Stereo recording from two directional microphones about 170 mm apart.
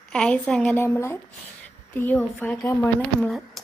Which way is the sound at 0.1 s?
5° left (ahead or behind).